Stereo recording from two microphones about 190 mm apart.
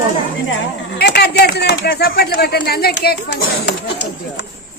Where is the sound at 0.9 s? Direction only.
60° left (ahead or behind).